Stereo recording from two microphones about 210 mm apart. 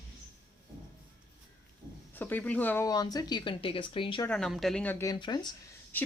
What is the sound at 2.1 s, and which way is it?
Speech, 10° left (ahead or behind).